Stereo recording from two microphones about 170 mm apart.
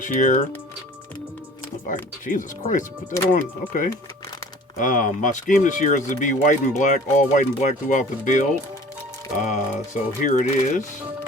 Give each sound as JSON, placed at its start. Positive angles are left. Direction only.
{"t": 0.0, "sound": "speech", "side_deg": 50}
{"t": 1.9, "sound": "speech", "side_deg": 50}
{"t": 4.8, "sound": "speech", "side_deg": 50}